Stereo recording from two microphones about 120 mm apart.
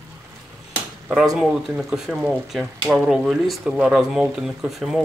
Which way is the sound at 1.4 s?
Centre (ahead or behind).